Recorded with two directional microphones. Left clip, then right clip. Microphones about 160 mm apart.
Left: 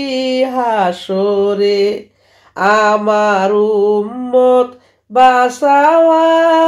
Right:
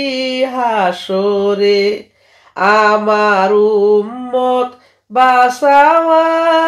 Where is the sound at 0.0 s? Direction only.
40° left (ahead or behind).